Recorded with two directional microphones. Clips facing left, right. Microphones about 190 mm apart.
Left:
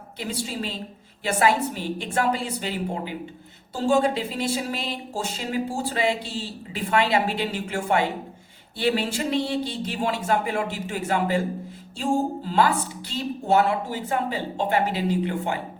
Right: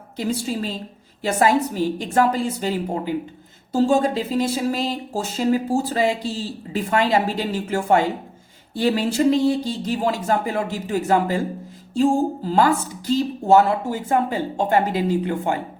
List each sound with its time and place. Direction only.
0.2 s speech: 45° right (ahead or behind)
12.5 s speech: 45° right (ahead or behind)